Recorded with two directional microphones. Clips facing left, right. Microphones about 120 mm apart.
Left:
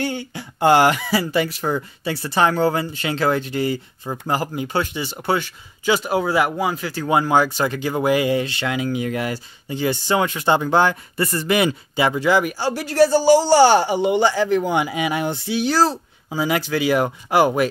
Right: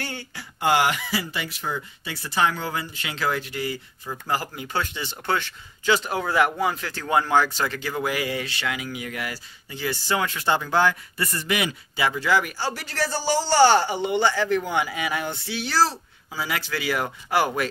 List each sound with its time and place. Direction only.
0.0 s a sound: 15° left (ahead or behind)
0.6 s speech: 40° left (ahead or behind)
2.2 s speech: 35° left (ahead or behind)
11.9 s a man's voice: 25° left (ahead or behind)